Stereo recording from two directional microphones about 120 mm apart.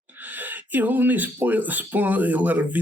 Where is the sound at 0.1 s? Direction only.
15° right (ahead or behind).